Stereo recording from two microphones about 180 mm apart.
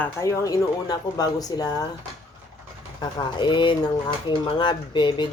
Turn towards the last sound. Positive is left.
turn(degrees=25)  # may be behind; listen again after turning